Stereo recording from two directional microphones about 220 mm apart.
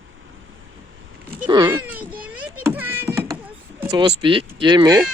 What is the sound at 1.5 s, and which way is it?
Speech, 20° right (ahead or behind).